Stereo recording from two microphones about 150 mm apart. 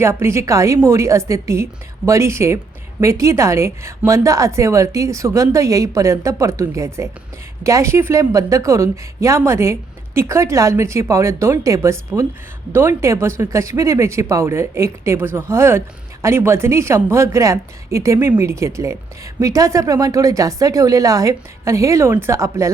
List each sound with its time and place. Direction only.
0.0 s a woman's voice: 15° right (ahead or behind)